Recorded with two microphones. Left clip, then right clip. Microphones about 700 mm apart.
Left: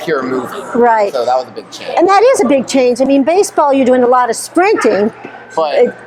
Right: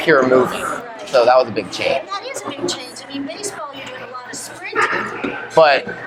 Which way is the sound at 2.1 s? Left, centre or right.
Left.